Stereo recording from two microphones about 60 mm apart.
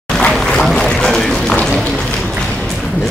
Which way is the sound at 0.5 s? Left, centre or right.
Centre.